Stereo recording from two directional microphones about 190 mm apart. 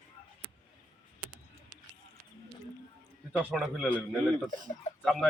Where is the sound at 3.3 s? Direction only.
5° right (ahead or behind).